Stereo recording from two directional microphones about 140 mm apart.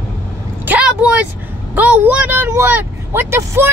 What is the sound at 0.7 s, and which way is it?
Vehicle, 5° right (ahead or behind).